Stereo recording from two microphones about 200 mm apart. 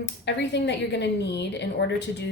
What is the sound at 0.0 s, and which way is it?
A woman's voice, 60° left (ahead or behind).